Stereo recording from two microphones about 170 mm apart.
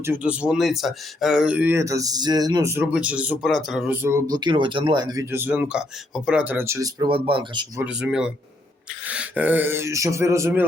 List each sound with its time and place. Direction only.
0.0 s speech: 10° right (ahead or behind)
2.7 s speech: 10° right (ahead or behind)
4.3 s speech: 25° right (ahead or behind)
7.8 s speech: 5° right (ahead or behind)